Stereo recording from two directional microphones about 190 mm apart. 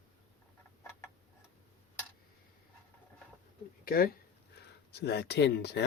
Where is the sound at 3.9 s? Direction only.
50° left (ahead or behind).